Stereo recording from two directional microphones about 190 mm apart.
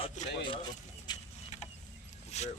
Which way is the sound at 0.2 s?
40° left (ahead or behind).